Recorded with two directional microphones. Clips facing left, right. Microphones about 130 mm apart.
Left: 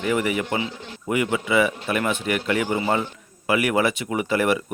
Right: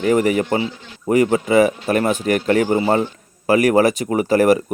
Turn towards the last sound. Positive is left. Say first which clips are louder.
# right 7 dB
turn(degrees=-40)  # may be behind; listen again after turning